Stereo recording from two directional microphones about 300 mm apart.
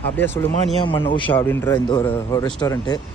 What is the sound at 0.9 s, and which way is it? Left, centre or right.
Speech, centre.